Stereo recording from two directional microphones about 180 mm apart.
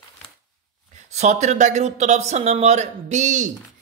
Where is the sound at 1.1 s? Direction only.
40° right (ahead or behind).